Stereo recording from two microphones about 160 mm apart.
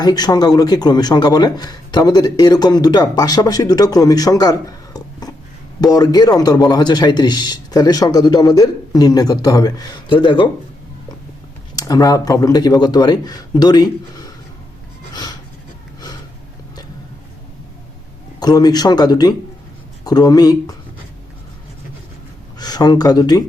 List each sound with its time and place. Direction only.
0.0 s a man's voice: 25° left (ahead or behind)
5.8 s a man's voice: 25° left (ahead or behind)
11.8 s a man's voice: 20° left (ahead or behind)
15.1 s a sound: 25° left (ahead or behind)
18.3 s a man's voice: 25° left (ahead or behind)
22.5 s speech: 25° left (ahead or behind)